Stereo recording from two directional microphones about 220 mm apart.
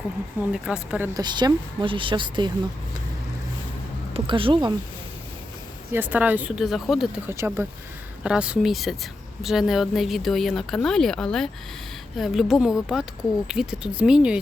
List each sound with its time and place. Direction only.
0.5 s speech: 5° right (ahead or behind); by 2.5 s 20° right (ahead or behind)
4.1 s speech: 25° right (ahead or behind)
5.9 s speech: 10° right (ahead or behind)